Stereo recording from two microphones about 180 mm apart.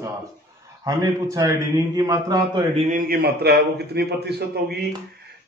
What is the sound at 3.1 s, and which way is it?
A man's voice, 60° right (ahead or behind).